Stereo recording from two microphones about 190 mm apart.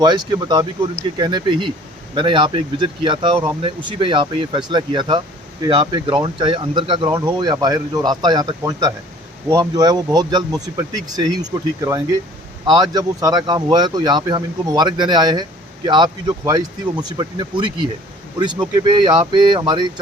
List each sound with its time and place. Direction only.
0.0 s speech: 20° right (ahead or behind)